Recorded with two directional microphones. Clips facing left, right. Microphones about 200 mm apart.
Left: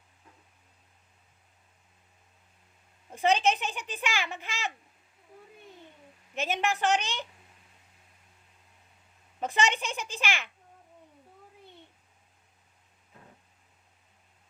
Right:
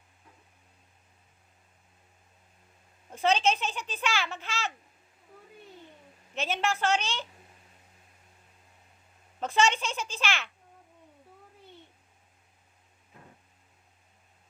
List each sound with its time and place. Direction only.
3.1 s a child's voice: 15° left (ahead or behind)
6.3 s a child's voice: 15° left (ahead or behind)
9.4 s a child's voice: 15° left (ahead or behind)